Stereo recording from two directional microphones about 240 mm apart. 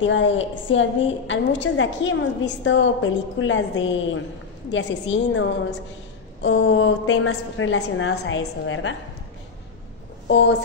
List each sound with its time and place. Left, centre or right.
0.0 s a woman's voice: left